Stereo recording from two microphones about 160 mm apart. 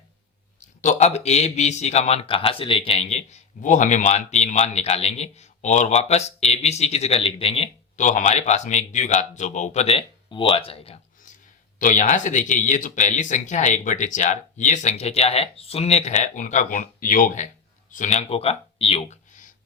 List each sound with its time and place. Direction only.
0.8 s a man's voice: 45° left (ahead or behind)
7.9 s a man's voice: 50° left (ahead or behind)
11.8 s a man's voice: 55° left (ahead or behind); by 19.2 s 35° left (ahead or behind)